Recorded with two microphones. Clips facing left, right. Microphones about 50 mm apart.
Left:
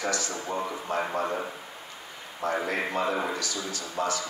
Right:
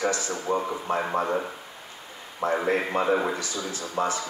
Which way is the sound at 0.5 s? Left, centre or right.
Centre.